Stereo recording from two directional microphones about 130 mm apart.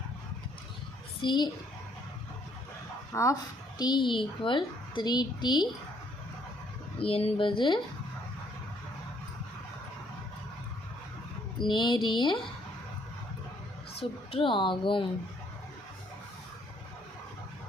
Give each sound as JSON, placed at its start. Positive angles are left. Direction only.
{"t": 1.2, "sound": "a child's voice", "side_deg": 35}
{"t": 3.1, "sound": "speech", "side_deg": 20}
{"t": 3.8, "sound": "a child's voice", "side_deg": 35}
{"t": 7.0, "sound": "a child's voice", "side_deg": 50}
{"t": 11.5, "sound": "a child's voice", "side_deg": 35}
{"t": 14.0, "sound": "a child's voice", "side_deg": 45}